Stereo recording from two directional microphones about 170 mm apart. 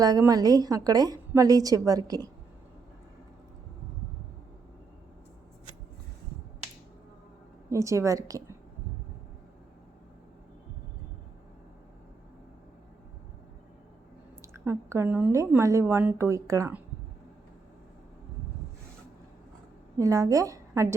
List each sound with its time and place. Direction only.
0.0 s a woman's voice: 20° right (ahead or behind)
7.7 s speech: 20° right (ahead or behind)
14.4 s speech: 15° right (ahead or behind)
20.0 s a woman's voice: 20° right (ahead or behind)